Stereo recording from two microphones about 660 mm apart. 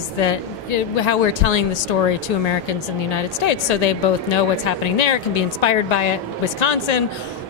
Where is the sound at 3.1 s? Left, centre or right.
Left.